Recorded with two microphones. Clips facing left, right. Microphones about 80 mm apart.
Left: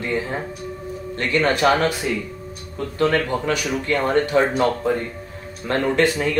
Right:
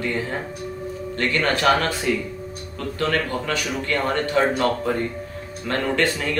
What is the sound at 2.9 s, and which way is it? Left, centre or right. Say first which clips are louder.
Speech: left 4 dB; centre.